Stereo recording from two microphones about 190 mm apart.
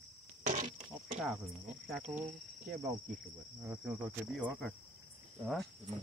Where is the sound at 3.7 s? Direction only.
10° right (ahead or behind).